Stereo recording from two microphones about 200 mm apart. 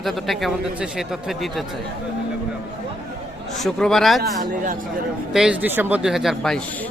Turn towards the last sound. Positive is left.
turn(degrees=0)  # may be behind; listen again after turning